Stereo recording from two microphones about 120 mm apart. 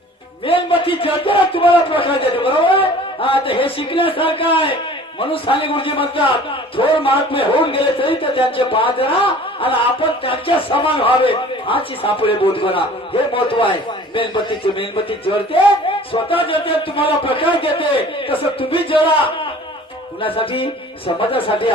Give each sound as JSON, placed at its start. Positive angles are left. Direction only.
{"t": 0.4, "sound": "speech", "side_deg": 50}
{"t": 20.2, "sound": "speech", "side_deg": 50}